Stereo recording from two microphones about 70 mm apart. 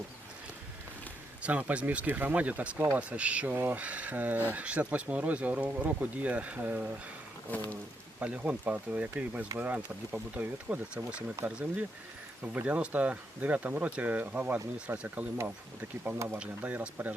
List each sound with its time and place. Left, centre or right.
1.4 s speech: centre
3.0 s speech: centre
3.5 s speech: right
3.8 s speech: centre
8.2 s speech: centre
16.1 s speech: right
16.6 s speech: right